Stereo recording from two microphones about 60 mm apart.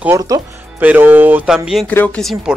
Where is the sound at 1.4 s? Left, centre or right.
Centre.